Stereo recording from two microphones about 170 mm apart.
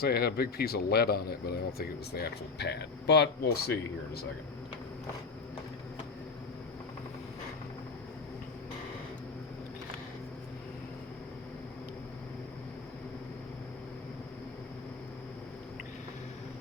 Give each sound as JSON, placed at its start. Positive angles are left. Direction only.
{"t": 0.0, "sound": "speech", "side_deg": 65}